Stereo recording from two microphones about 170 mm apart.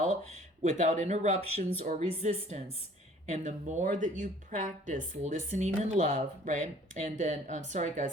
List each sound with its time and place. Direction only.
0.6 s speech: 45° right (ahead or behind)